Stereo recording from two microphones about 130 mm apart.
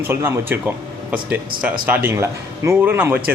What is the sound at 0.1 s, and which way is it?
A man's voice, 20° right (ahead or behind).